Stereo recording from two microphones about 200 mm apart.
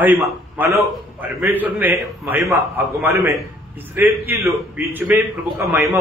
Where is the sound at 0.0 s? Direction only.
10° right (ahead or behind).